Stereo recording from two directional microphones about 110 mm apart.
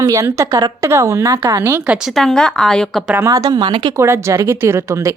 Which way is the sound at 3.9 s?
25° right (ahead or behind).